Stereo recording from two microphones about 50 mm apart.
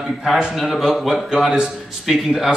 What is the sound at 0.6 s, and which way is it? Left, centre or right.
A man's voice, centre.